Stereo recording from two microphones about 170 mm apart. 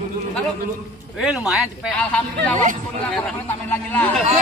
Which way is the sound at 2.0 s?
10° left (ahead or behind).